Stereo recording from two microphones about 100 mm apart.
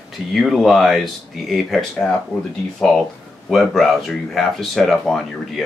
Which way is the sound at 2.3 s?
25° left (ahead or behind).